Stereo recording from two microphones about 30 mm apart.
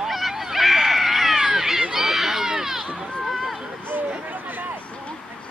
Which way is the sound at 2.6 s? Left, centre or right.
Centre.